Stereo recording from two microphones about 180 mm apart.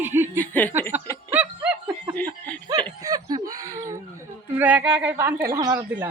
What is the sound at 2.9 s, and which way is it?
Speech, 20° right (ahead or behind).